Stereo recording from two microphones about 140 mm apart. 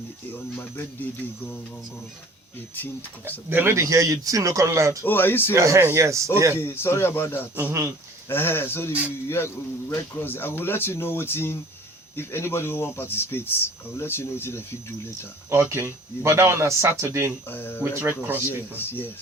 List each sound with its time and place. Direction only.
0.3 s speech: 15° left (ahead or behind)
3.5 s speech: 15° right (ahead or behind)
5.0 s speech: 15° left (ahead or behind)
5.5 s speech: 20° right (ahead or behind)
6.6 s speech: 20° left (ahead or behind)
7.5 s speech: 20° right (ahead or behind)
8.3 s speech: 15° left (ahead or behind)
15.4 s speech: 20° right (ahead or behind)
17.5 s speech: 15° left (ahead or behind)